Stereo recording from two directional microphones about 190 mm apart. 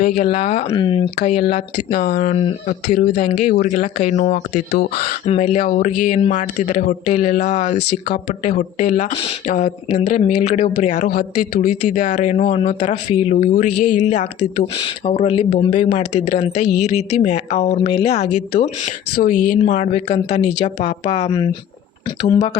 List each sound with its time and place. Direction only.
0.0 s speech: 40° left (ahead or behind)
1.9 s speech: 55° left (ahead or behind)
2.1 s speech: 35° left (ahead or behind)
2.9 s speech: 55° left (ahead or behind)
3.4 s speech: 40° left (ahead or behind)
4.7 s speech: 55° left (ahead or behind)
5.2 s speech: 35° left (ahead or behind)
11.1 s speech: 50° left (ahead or behind); by 18.7 s 35° left (ahead or behind)
19.1 s speech: 45° left (ahead or behind)